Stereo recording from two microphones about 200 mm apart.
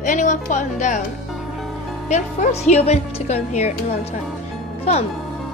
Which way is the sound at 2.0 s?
35° left (ahead or behind).